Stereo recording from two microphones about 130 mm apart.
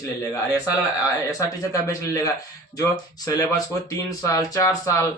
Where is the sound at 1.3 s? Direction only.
25° left (ahead or behind).